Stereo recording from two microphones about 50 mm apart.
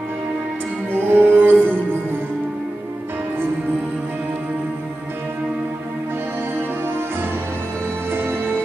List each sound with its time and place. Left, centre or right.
0.9 s music: right
8.1 s music: right